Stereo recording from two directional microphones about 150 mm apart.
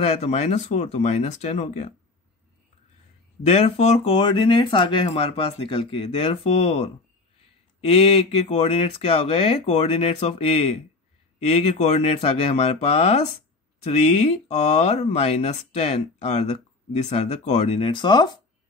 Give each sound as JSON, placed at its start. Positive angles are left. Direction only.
{"t": 0.0, "sound": "speech", "side_deg": 45}
{"t": 3.4, "sound": "speech", "side_deg": 45}